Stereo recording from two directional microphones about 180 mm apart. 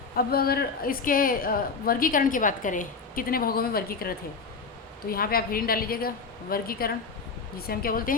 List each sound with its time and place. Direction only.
0.2 s a woman's voice: 55° left (ahead or behind)